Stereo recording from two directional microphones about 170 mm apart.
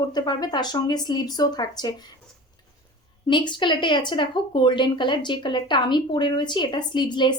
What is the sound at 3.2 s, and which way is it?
A woman's voice, 25° left (ahead or behind).